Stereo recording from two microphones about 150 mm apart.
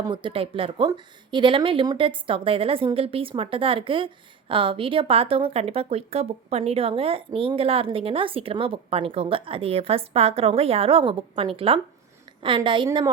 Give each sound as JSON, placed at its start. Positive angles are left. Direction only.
{"t": 0.0, "sound": "speech", "side_deg": -35}